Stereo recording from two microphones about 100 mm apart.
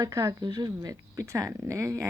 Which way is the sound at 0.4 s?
45° right (ahead or behind).